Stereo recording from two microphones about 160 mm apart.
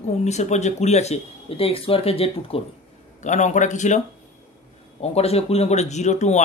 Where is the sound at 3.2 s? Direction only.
50° left (ahead or behind).